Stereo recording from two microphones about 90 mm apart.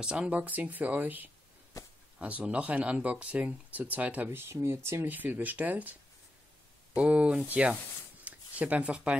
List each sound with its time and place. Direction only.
0.0 s speech: 10° right (ahead or behind)
1.8 s a sound: 40° left (ahead or behind)
2.1 s speech: 15° right (ahead or behind); by 5.0 s 30° right (ahead or behind)
5.0 s speech: 20° right (ahead or behind)
7.0 s speech: 15° right (ahead or behind)
8.2 s a sound: 15° right (ahead or behind)